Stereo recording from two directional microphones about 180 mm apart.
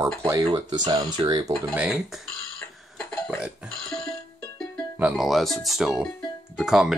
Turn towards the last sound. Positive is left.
turn(degrees=-5)  # may be behind; listen again after turning